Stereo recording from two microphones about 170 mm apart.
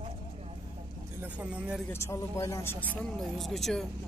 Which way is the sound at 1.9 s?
15° left (ahead or behind).